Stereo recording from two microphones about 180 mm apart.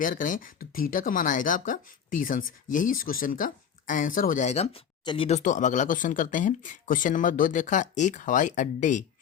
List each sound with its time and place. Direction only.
0.0 s speech: 50° left (ahead or behind); by 5.4 s 30° left (ahead or behind)
5.4 s speech: 45° left (ahead or behind)